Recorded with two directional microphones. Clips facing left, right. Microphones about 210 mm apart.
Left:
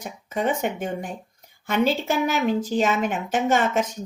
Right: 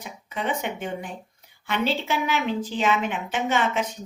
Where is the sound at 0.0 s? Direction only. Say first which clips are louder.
Left 5 dB; 45° left (ahead or behind).